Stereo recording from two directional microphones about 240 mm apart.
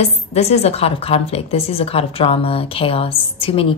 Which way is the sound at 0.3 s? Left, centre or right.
Left.